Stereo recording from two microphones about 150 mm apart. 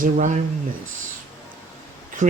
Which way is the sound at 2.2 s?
60° right (ahead or behind).